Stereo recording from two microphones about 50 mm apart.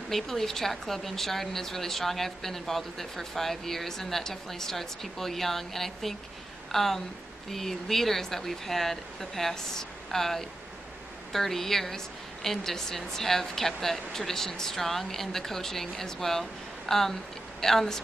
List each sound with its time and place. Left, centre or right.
0.1 s speech: centre